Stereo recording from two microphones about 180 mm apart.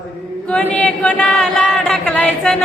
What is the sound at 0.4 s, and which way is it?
A capella, 5° left (ahead or behind).